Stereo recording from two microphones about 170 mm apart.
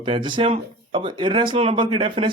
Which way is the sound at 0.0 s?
30° right (ahead or behind).